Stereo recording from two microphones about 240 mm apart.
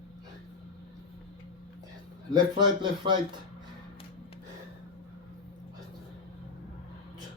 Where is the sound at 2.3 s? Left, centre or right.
Centre.